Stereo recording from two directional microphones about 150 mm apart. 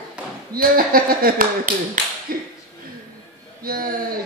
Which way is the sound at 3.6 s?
75° right (ahead or behind).